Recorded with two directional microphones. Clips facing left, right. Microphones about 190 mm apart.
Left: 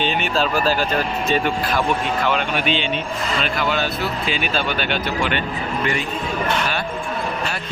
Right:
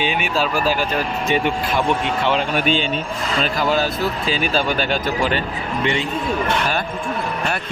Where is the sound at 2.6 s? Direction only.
45° right (ahead or behind).